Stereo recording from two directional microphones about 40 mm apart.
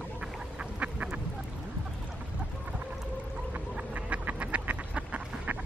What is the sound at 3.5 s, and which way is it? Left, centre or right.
Duck, right.